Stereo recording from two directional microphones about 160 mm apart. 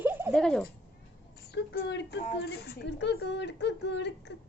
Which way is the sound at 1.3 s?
90° left.